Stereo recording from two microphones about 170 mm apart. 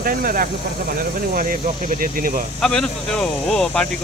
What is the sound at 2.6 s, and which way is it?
Speech, 5° left (ahead or behind).